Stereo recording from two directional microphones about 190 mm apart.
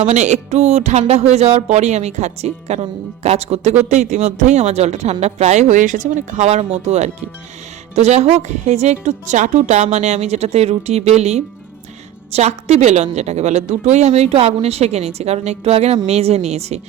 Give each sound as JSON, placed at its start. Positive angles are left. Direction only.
{"t": 0.1, "sound": "speech", "side_deg": -35}